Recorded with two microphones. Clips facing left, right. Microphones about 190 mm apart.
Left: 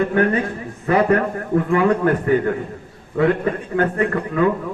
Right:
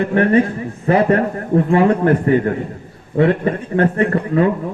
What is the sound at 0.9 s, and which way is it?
A man's voice, 30° right (ahead or behind).